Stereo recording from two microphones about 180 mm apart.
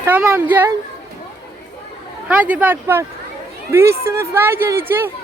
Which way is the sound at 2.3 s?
10° right (ahead or behind).